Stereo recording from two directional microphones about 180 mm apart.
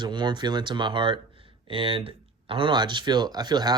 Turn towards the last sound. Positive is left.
turn(degrees=-20)  # may be behind; listen again after turning